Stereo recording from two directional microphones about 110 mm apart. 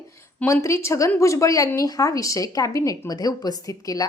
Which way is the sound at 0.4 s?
25° left (ahead or behind).